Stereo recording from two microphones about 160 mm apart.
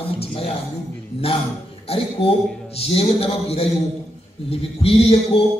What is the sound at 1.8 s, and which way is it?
A man's voice, 35° left (ahead or behind).